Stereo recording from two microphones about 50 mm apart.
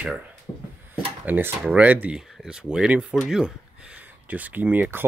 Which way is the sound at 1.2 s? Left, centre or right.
Right.